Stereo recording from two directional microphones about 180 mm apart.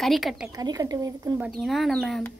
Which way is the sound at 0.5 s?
20° right (ahead or behind).